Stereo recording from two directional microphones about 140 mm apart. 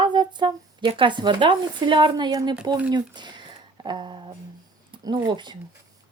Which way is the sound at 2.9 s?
30° right (ahead or behind).